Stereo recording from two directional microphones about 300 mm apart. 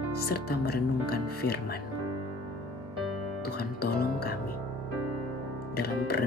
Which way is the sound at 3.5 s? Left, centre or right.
Left.